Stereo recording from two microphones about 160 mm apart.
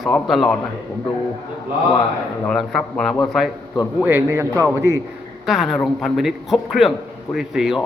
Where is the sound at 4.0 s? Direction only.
15° right (ahead or behind).